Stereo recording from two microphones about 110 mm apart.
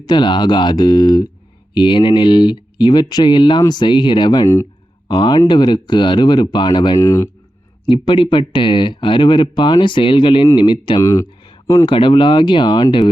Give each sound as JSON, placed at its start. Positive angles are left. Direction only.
{"t": 0.0, "sound": "speech", "side_deg": 45}
{"t": 7.0, "sound": "speech", "side_deg": 30}
{"t": 7.9, "sound": "speech", "side_deg": 50}
{"t": 11.0, "sound": "speech", "side_deg": 30}
{"t": 11.9, "sound": "speech", "side_deg": 50}